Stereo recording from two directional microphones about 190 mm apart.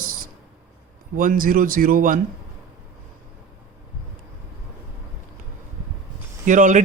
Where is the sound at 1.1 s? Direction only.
45° right (ahead or behind).